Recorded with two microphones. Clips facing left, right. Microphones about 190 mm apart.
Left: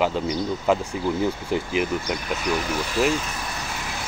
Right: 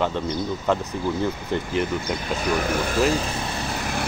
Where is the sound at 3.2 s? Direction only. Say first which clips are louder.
Right 4 dB; 25° right (ahead or behind).